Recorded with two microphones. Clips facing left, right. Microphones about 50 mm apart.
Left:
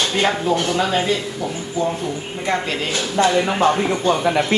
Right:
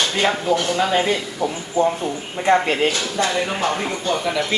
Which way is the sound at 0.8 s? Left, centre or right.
Right.